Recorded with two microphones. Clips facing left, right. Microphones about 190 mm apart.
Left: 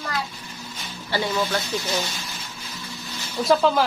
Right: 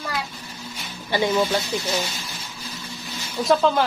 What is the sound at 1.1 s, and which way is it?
Speech, 20° right (ahead or behind).